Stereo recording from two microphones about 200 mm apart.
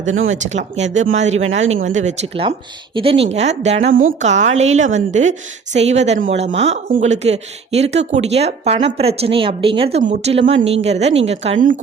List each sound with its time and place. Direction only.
0.0 s speech: 75° right (ahead or behind)
0.4 s speech: 35° right (ahead or behind)